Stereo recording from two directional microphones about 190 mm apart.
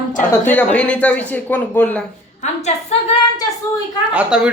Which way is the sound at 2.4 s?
35° left (ahead or behind).